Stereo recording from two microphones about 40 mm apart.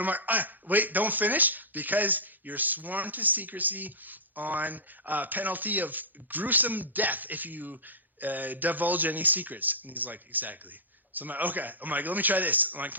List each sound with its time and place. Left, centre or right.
0.0 s speech: right